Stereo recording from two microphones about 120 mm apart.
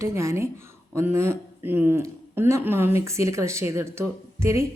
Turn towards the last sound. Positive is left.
turn(degrees=-25)  # may be behind; listen again after turning